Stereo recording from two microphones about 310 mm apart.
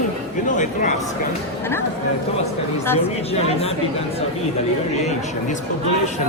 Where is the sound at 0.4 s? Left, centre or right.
Left.